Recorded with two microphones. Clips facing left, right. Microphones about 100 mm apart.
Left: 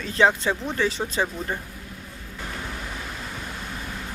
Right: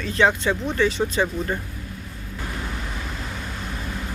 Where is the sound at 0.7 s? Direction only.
30° left (ahead or behind).